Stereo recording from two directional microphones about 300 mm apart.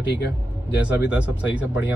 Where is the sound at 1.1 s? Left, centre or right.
Centre.